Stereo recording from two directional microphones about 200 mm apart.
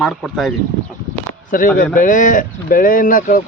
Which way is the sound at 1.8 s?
40° left (ahead or behind).